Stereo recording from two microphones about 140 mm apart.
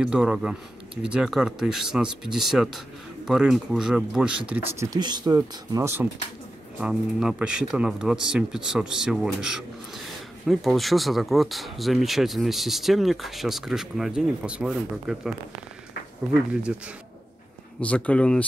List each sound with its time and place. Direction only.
0.0 s speech: 5° right (ahead or behind)
4.7 s speech: 25° right (ahead or behind)
6.8 s speech: 5° right (ahead or behind)
16.7 s speech: 5° right (ahead or behind)
17.7 s speech: 10° left (ahead or behind)